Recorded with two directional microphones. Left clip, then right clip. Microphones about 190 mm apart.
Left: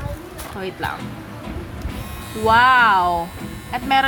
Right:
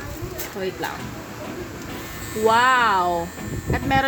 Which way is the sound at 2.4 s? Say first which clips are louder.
Left 4 dB; 10° left (ahead or behind).